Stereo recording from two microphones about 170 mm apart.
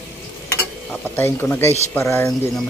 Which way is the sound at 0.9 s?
10° left (ahead or behind).